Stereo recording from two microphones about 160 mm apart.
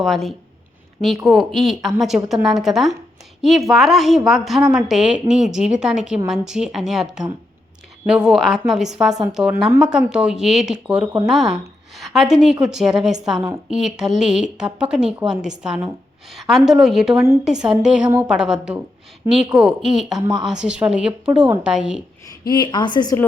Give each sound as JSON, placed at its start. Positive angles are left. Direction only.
{"t": 0.0, "sound": "a woman's voice", "side_deg": 0}
{"t": 20.1, "sound": "a woman's voice", "side_deg": -25}
{"t": 20.4, "sound": "a woman's voice", "side_deg": -5}
{"t": 22.4, "sound": "a woman's voice", "side_deg": 30}